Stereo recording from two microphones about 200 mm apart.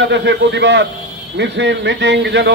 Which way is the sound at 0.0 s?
60° right (ahead or behind).